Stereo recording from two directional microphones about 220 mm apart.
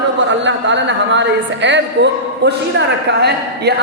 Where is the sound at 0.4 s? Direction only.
55° right (ahead or behind).